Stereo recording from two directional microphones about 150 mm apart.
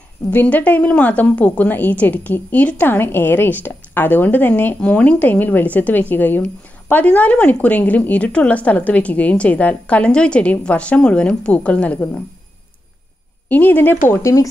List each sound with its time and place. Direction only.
0.3 s a woman's voice: 10° left (ahead or behind)
13.5 s a woman's voice: 10° left (ahead or behind)